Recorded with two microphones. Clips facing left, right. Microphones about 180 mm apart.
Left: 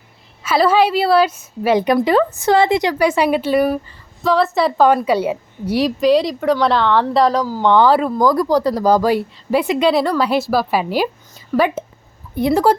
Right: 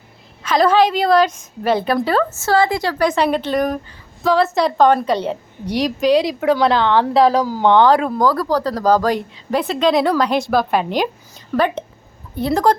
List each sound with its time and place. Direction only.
0.4 s speech: 5° left (ahead or behind); by 2.9 s 20° left (ahead or behind)
3.0 s a woman's voice: 10° left (ahead or behind)
7.4 s speech: 15° right (ahead or behind)
7.7 s a woman's voice: 5° left (ahead or behind)
8.2 s speech: 15° left (ahead or behind)